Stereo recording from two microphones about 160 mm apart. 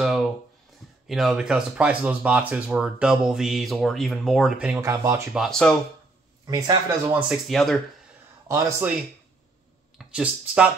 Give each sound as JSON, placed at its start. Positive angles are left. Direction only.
{"t": 0.0, "sound": "a sound", "side_deg": 0}
{"t": 1.0, "sound": "speech", "side_deg": 0}
{"t": 4.8, "sound": "speech", "side_deg": -20}
{"t": 5.3, "sound": "speech", "side_deg": 0}
{"t": 6.4, "sound": "speech", "side_deg": -25}
{"t": 7.1, "sound": "speech", "side_deg": -5}
{"t": 8.5, "sound": "a man's voice", "side_deg": -20}
{"t": 9.9, "sound": "speech", "side_deg": -5}